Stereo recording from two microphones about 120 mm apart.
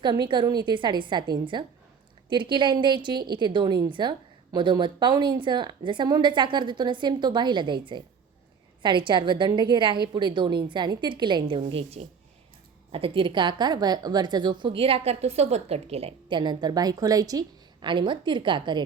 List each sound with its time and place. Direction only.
0.0 s a woman's voice: 40° right (ahead or behind)
11.7 s a woman's voice: 55° right (ahead or behind)
16.4 s a woman's voice: 35° right (ahead or behind)